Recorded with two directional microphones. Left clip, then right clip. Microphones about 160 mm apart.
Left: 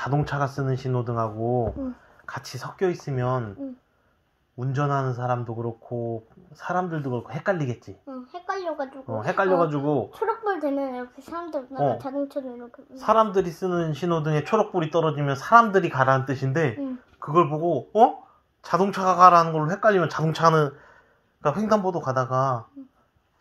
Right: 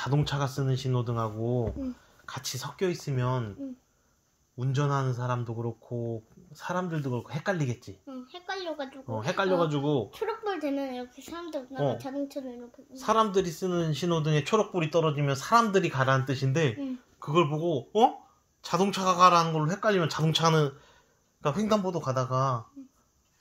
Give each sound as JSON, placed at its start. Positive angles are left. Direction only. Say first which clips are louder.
{"t": 0.0, "sound": "speech", "louder": "left 5 dB", "side_deg": -25}
{"t": 4.6, "sound": "speech", "louder": "left 4 dB", "side_deg": -25}